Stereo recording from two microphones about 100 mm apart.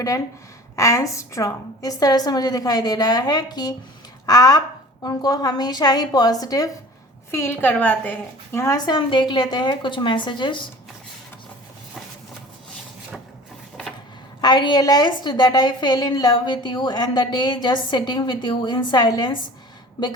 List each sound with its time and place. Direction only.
0.8 s a woman's voice: 30° left (ahead or behind)
7.3 s a woman's voice: 25° left (ahead or behind)
8.5 s speech: 30° left (ahead or behind)
8.8 s a woman's voice: 50° left (ahead or behind)
14.4 s a woman's voice: 45° left (ahead or behind)